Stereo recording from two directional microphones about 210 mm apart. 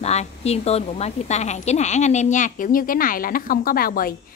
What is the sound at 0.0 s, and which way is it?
A woman's voice, 30° left (ahead or behind).